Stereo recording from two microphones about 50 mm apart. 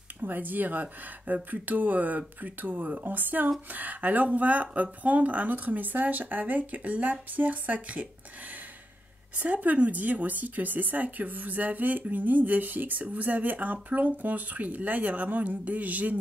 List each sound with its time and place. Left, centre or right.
0.2 s speech: right
9.4 s speech: right